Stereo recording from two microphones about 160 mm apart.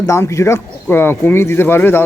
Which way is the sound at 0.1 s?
20° left (ahead or behind).